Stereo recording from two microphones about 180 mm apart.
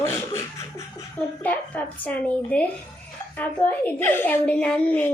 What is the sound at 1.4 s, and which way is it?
A child's voice, 10° left (ahead or behind).